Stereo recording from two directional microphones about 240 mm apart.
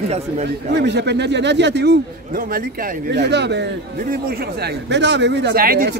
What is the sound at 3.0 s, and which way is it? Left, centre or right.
Speech, right.